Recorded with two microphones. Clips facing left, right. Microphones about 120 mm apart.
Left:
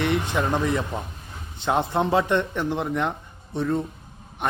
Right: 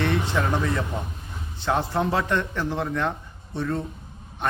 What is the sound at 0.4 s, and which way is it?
A man's voice, 15° left (ahead or behind).